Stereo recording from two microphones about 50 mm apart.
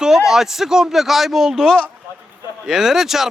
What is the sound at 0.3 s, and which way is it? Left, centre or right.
Speech, centre.